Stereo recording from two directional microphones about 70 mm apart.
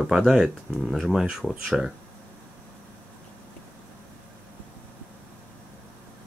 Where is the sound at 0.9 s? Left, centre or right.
Centre.